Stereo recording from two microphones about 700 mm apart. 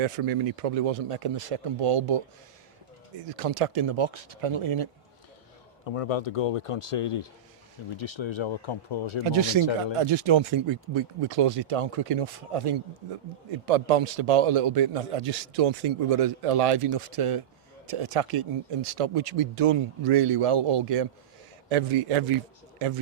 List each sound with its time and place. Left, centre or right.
0.0 s a man's voice: right
3.2 s a man's voice: right
5.8 s speech: left
9.2 s a man's voice: right